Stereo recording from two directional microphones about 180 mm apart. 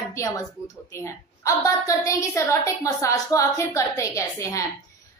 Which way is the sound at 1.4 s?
15° left (ahead or behind).